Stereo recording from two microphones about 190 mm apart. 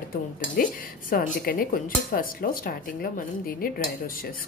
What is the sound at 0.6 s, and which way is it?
Speech, 45° left (ahead or behind).